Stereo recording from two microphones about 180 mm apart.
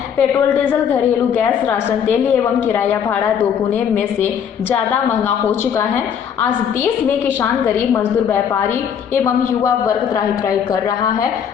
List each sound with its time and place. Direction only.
0.2 s a woman's voice: 10° left (ahead or behind)
10.7 s a woman's voice: 20° left (ahead or behind)